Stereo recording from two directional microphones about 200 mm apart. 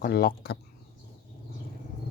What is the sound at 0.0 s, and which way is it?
Speech, 45° left (ahead or behind).